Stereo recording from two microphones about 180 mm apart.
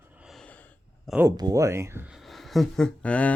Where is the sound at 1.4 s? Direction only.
20° right (ahead or behind).